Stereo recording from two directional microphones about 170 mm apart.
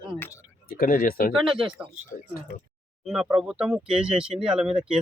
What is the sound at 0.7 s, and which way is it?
Speech, 55° left (ahead or behind).